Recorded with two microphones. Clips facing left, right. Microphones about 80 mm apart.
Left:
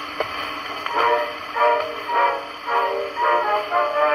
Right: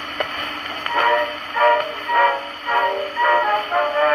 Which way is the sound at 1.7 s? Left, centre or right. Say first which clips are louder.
Right 2 dB; right.